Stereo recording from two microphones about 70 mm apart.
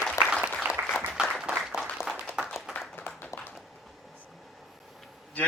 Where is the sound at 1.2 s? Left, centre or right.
Centre.